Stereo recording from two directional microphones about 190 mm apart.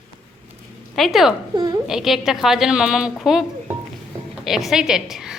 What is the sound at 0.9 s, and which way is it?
Speech, centre (ahead or behind).